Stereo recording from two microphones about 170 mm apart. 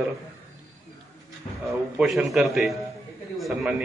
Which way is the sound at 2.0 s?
Centre (ahead or behind).